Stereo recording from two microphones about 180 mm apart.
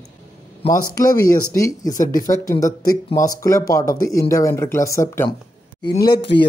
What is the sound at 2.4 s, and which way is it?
Speech, 20° left (ahead or behind).